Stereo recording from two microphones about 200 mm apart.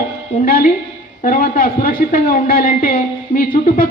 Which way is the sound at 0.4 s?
45° left (ahead or behind).